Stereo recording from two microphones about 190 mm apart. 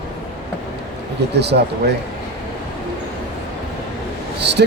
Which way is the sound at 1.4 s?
60° right (ahead or behind).